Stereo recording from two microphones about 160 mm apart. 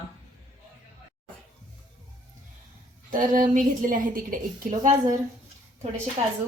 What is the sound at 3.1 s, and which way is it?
A woman's voice, 55° right (ahead or behind).